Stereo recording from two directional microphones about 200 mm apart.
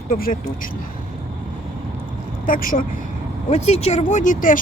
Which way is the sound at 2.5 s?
40° left (ahead or behind).